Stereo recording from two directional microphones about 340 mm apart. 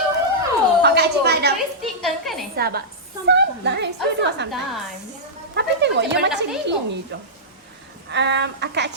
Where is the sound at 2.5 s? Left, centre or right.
Right.